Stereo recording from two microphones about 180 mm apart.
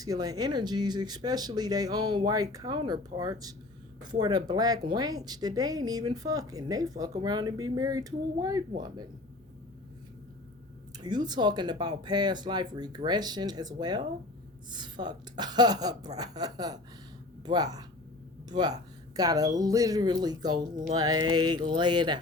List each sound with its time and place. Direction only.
0.0 s a woman's voice: 20° right (ahead or behind)
10.9 s a woman's voice: 25° right (ahead or behind)